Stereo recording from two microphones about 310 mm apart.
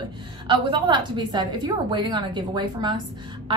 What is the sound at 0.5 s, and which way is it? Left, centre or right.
A woman's voice, centre.